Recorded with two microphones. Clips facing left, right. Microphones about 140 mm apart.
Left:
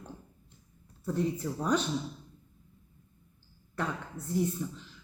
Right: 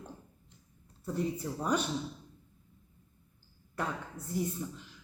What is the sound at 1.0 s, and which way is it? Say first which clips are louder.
Speech: left 3 dB; 10° right (ahead or behind).